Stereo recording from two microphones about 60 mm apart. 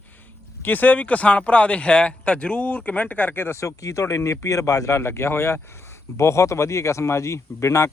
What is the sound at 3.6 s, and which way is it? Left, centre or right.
Speech, left.